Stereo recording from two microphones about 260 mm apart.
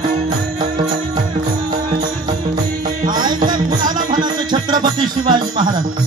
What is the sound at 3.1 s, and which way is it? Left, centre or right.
Music, centre.